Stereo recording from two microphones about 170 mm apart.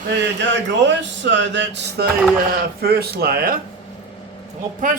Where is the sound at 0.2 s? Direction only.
90° right.